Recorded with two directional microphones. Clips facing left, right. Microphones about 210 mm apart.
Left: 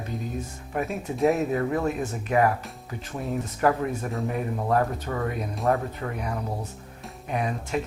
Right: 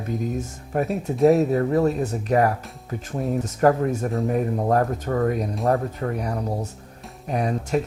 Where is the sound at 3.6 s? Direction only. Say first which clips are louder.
Right 5 dB; 45° right (ahead or behind).